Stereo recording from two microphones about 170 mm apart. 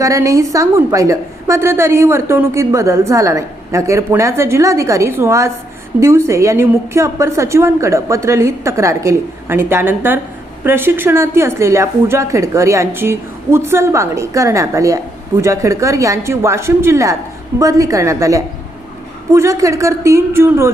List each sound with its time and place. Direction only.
0.0 s a woman's voice: 20° right (ahead or behind)